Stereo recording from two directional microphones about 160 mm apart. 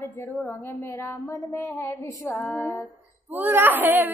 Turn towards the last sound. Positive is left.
turn(degrees=-10)  # may be behind; listen again after turning